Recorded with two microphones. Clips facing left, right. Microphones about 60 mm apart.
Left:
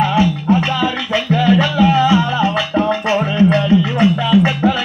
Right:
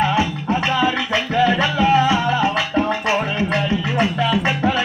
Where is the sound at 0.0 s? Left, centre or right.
Centre.